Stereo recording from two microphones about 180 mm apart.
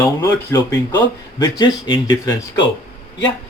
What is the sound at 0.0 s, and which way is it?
Speech, 20° left (ahead or behind).